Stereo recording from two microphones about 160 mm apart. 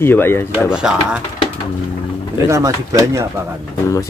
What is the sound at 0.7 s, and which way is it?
Speech, 5° right (ahead or behind).